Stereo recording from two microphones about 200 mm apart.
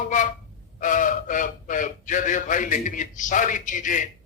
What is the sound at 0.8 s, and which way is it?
A man's voice, 40° left (ahead or behind).